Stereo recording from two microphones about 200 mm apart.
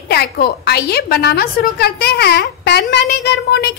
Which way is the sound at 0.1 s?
55° left (ahead or behind).